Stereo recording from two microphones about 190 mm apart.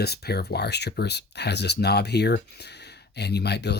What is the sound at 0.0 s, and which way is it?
Speech, 60° left (ahead or behind).